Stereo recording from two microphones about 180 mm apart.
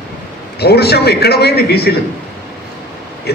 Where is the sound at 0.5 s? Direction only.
65° left (ahead or behind).